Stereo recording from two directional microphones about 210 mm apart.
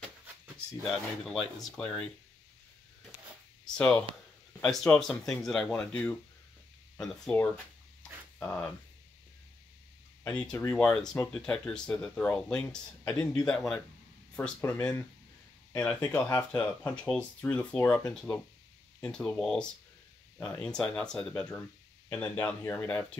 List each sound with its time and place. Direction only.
1.2 s speech: 5° left (ahead or behind)
3.6 s speech: 5° left (ahead or behind)
10.2 s speech: 5° left (ahead or behind)
14.8 s speech: 15° left (ahead or behind)